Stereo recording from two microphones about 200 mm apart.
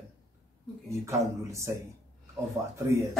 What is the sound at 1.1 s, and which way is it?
Speech, 15° right (ahead or behind).